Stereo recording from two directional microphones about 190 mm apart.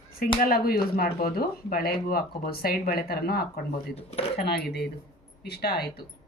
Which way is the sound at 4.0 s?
30° left (ahead or behind).